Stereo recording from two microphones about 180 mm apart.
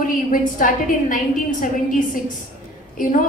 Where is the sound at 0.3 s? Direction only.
50° left (ahead or behind).